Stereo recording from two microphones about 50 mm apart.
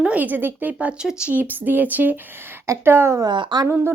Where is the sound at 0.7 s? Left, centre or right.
Right.